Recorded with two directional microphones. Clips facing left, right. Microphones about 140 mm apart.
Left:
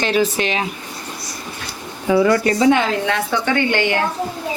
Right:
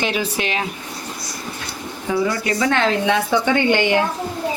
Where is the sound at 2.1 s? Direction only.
65° left (ahead or behind).